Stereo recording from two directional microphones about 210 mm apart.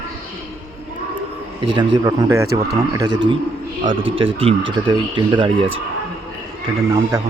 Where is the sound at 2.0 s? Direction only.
20° right (ahead or behind).